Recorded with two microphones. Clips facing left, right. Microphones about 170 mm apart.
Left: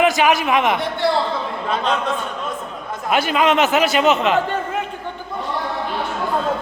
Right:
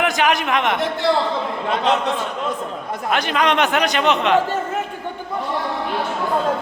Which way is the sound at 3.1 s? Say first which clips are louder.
Left 2 dB; 5° left (ahead or behind).